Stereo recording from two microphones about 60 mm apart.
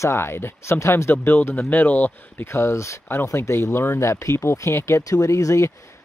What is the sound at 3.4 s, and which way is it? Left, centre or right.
Speech, left.